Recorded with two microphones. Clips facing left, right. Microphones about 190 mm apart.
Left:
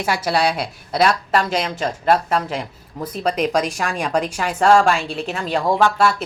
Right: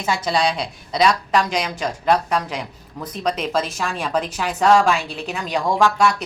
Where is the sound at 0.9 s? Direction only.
50° left (ahead or behind).